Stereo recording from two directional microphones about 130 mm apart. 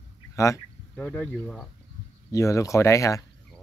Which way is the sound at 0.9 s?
10° left (ahead or behind).